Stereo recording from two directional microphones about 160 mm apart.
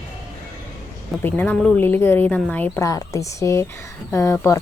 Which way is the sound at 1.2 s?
10° left (ahead or behind).